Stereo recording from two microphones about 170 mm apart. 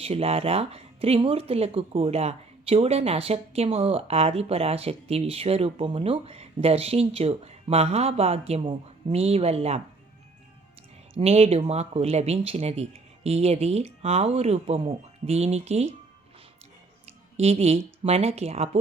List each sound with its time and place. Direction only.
0.0 s speech: 35° right (ahead or behind)
11.1 s speech: 35° right (ahead or behind)
17.4 s speech: 35° right (ahead or behind)